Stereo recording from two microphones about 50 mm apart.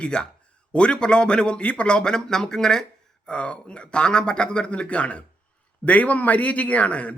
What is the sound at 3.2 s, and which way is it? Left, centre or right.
A man's voice, left.